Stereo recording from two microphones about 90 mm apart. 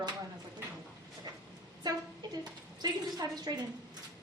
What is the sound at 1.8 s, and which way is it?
A woman's voice, 50° right (ahead or behind).